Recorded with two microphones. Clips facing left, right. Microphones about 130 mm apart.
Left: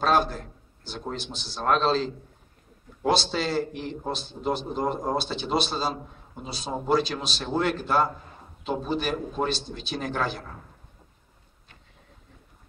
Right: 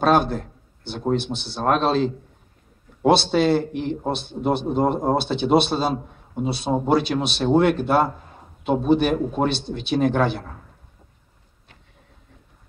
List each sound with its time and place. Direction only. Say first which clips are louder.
0.0 s a man's voice: right 5 dB; 60° right (ahead or behind)